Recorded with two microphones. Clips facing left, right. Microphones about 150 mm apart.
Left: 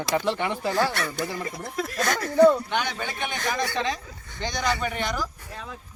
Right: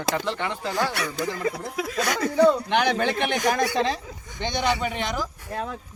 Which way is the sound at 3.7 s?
35° right (ahead or behind).